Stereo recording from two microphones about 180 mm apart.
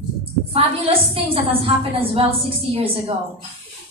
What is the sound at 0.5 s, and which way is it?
A woman's voice, 30° right (ahead or behind).